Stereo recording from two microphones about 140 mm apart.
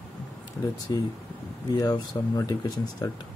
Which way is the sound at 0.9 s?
25° left (ahead or behind).